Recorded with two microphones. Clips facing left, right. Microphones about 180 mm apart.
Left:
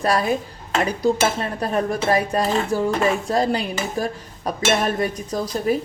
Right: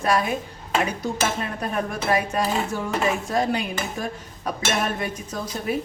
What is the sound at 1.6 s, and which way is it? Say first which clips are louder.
Speech: left 7 dB; 35° left (ahead or behind).